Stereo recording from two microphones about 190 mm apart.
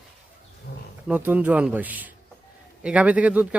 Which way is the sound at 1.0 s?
10° right (ahead or behind).